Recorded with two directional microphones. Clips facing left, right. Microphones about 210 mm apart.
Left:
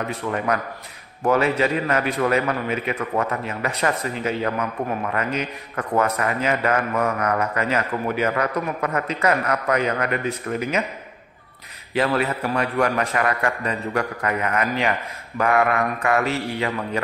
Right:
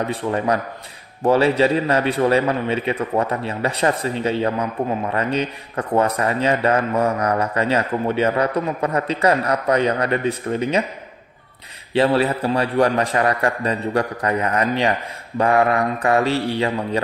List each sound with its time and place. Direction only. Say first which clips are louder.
0.1 s a man's voice: right 3 dB; 30° right (ahead or behind)
11.9 s a man's voice: right 4 dB; 30° right (ahead or behind)